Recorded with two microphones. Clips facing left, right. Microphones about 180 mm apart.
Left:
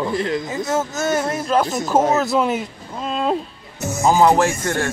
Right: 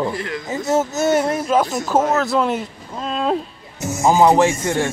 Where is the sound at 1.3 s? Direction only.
5° right (ahead or behind).